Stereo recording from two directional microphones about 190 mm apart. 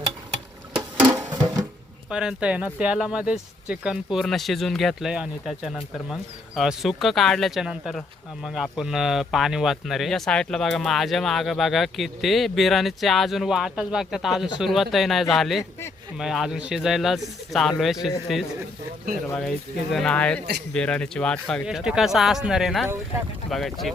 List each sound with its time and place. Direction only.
1.1 s a sound: 20° right (ahead or behind)
2.0 s speech: 5° right (ahead or behind)
19.4 s speech: centre (ahead or behind)